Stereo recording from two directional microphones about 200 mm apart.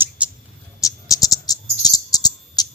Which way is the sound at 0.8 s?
15° left (ahead or behind).